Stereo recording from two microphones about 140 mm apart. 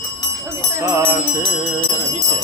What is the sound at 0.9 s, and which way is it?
Music, 20° right (ahead or behind).